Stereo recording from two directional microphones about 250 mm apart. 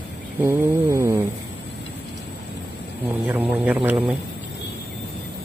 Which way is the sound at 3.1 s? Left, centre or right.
Centre.